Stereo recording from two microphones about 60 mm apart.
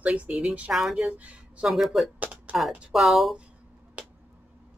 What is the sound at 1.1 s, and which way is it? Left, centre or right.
Speech, right.